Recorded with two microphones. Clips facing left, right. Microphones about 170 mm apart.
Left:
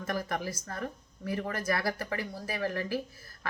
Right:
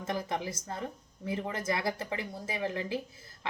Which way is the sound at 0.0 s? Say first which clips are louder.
Even; 20° right (ahead or behind).